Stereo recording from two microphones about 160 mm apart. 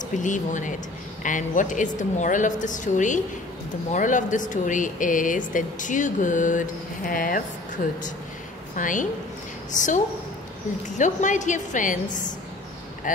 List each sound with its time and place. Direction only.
0.1 s a woman's voice: 50° left (ahead or behind)
11.0 s speech: 50° left (ahead or behind)